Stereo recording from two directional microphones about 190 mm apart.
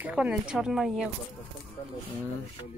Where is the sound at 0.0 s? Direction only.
5° right (ahead or behind).